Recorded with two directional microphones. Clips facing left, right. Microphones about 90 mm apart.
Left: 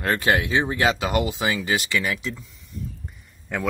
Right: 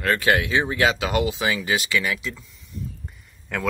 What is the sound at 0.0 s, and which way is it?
Speech, 25° left (ahead or behind).